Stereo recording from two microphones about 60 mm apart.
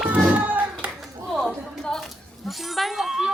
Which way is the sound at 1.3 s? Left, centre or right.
Centre.